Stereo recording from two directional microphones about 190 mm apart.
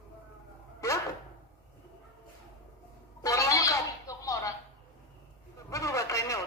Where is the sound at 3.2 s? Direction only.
15° left (ahead or behind).